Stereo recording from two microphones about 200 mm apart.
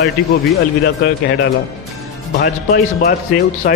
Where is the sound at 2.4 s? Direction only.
50° left (ahead or behind).